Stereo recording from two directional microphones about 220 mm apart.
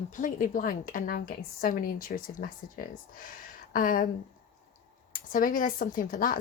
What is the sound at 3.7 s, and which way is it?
Speech, 40° left (ahead or behind).